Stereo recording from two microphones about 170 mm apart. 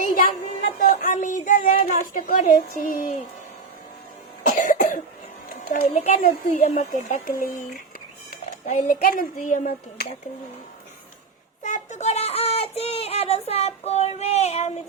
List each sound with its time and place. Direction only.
1.0 s a woman's voice: 50° left (ahead or behind)
4.4 s cough: 50° left (ahead or behind)
5.6 s speech: 55° left (ahead or behind)
6.0 s a child's voice: 40° left (ahead or behind)
6.2 s a woman's voice: 55° left (ahead or behind)
8.6 s a woman's voice: 50° left (ahead or behind)
11.6 s child singing: 45° left (ahead or behind)